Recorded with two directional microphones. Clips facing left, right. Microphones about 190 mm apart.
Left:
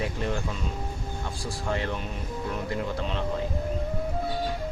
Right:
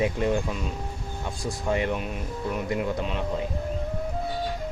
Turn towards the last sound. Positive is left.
turn(degrees=-10)  # may be behind; listen again after turning